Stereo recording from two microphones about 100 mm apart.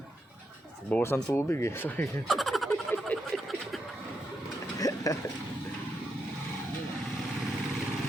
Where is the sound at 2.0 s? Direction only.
Centre (ahead or behind).